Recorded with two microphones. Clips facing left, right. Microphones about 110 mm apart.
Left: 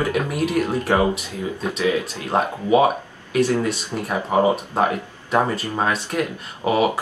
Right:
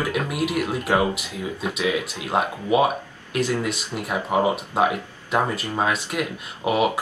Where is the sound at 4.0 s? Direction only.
15° right (ahead or behind).